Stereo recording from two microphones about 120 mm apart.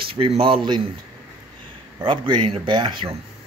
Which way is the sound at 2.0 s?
40° right (ahead or behind).